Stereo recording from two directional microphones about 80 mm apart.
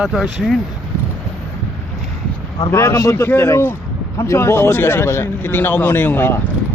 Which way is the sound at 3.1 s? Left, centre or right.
Left.